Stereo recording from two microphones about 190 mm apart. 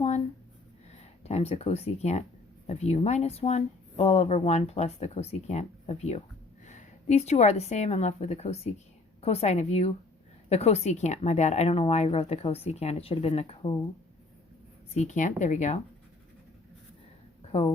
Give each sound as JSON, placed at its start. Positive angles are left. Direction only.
{"t": 1.2, "sound": "a woman's voice", "side_deg": 35}
{"t": 14.9, "sound": "speech", "side_deg": 40}
{"t": 17.5, "sound": "speech", "side_deg": 30}